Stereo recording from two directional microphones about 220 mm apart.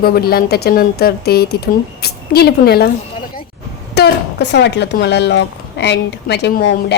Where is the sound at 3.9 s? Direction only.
50° left (ahead or behind).